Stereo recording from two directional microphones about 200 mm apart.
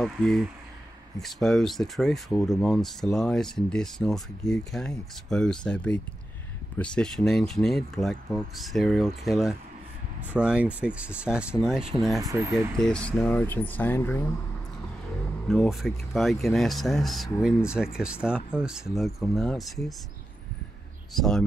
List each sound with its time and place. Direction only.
0.0 s speech: 5° left (ahead or behind)
12.3 s speech: 15° right (ahead or behind)
12.8 s speech: 5° left (ahead or behind)
15.4 s speech: centre (ahead or behind)
21.1 s speech: centre (ahead or behind)